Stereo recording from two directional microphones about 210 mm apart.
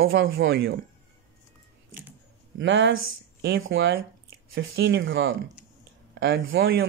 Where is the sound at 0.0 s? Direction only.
70° right (ahead or behind).